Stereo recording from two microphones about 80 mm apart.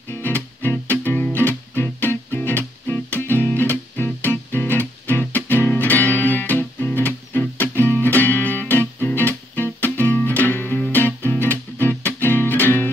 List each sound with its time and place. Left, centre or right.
0.1 s music: left